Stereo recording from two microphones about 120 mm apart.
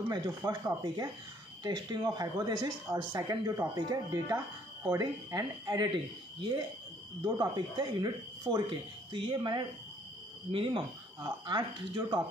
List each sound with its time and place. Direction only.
0.1 s speech: 35° right (ahead or behind)
7.2 s speech: 35° right (ahead or behind)